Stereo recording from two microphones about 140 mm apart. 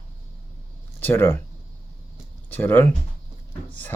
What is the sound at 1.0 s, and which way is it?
Speech, 15° left (ahead or behind).